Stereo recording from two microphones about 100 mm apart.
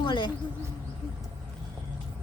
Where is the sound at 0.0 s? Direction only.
50° left (ahead or behind).